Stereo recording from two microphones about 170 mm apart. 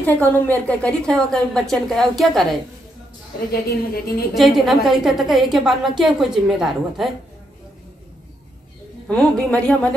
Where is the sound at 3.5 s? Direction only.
65° left (ahead or behind).